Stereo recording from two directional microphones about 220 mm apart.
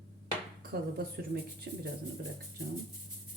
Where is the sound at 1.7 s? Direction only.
50° right (ahead or behind).